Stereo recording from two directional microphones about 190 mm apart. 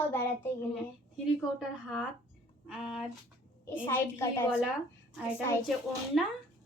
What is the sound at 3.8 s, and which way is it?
Speech, 10° left (ahead or behind).